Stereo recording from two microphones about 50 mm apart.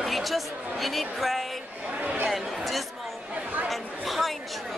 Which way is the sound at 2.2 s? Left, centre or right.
Centre.